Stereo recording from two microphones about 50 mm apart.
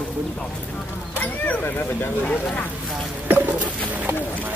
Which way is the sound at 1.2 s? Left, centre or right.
Left.